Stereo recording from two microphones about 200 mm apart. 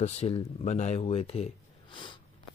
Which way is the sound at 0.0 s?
30° left (ahead or behind).